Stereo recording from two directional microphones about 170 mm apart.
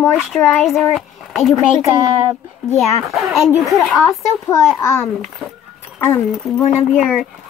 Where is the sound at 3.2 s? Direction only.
Centre (ahead or behind).